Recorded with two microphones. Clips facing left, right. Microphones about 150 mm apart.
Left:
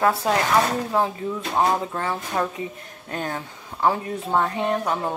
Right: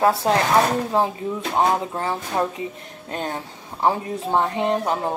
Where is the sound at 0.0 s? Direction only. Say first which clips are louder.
Right 2 dB; 30° right (ahead or behind).